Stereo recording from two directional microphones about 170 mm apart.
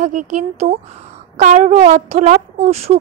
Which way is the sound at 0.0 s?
45° right (ahead or behind).